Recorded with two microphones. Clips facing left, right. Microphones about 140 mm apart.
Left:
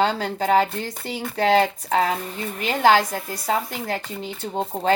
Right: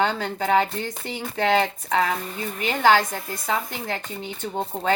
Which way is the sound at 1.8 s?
35° left (ahead or behind).